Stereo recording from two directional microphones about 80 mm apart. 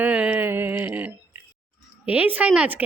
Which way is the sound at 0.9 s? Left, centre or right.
Right.